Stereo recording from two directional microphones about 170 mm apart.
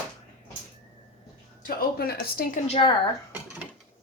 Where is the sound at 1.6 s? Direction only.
60° left (ahead or behind).